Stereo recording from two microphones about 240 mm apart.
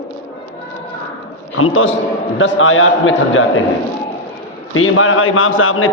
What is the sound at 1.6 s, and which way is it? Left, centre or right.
A man's voice, left.